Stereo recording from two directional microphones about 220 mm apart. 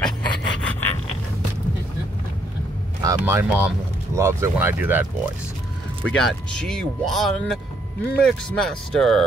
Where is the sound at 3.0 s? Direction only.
15° right (ahead or behind).